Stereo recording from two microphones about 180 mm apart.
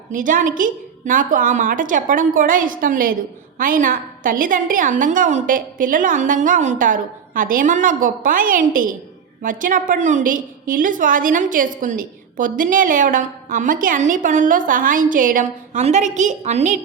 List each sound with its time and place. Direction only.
0.1 s a woman's voice: 50° right (ahead or behind)